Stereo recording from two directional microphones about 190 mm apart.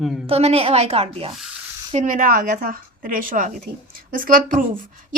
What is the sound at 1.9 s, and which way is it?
A woman's voice, 40° right (ahead or behind).